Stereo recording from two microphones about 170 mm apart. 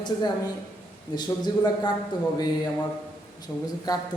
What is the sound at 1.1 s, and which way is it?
Speech, 25° left (ahead or behind).